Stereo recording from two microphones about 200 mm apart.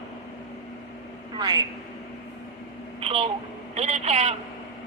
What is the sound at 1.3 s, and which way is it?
Speech, 20° right (ahead or behind).